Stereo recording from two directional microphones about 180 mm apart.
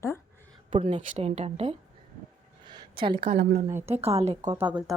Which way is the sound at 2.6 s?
25° right (ahead or behind).